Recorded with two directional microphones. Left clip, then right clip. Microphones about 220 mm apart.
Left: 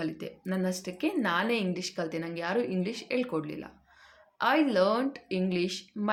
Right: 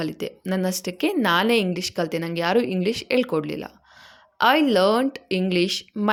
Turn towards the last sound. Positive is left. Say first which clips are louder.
# right 9 dB
turn(degrees=-40)  # may be behind; listen again after turning